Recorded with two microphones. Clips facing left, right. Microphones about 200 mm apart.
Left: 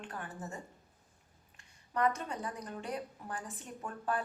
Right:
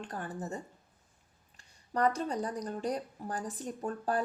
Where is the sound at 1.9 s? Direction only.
35° right (ahead or behind).